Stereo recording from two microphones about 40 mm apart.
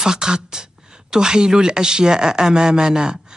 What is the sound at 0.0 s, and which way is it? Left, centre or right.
Speech, centre.